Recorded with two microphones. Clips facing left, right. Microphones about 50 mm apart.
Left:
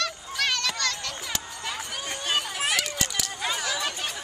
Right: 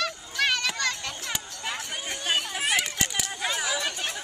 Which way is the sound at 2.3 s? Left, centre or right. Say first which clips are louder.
Right 1 dB; centre.